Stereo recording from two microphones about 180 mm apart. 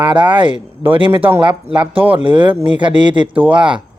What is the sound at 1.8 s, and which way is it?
Speech, 30° right (ahead or behind).